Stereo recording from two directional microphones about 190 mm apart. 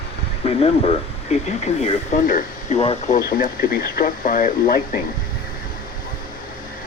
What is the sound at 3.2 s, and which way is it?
Speech, 50° left (ahead or behind).